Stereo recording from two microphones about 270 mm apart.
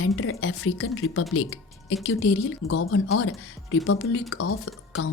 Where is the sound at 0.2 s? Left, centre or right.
Left.